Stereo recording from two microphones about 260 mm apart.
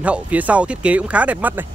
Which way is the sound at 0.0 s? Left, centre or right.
Centre.